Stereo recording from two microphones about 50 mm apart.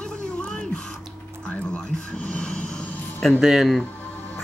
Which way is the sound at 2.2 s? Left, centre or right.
Centre.